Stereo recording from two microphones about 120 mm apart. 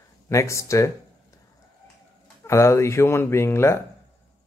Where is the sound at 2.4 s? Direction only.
25° left (ahead or behind).